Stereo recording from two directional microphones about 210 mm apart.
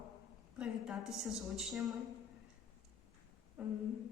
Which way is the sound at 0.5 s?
5° right (ahead or behind).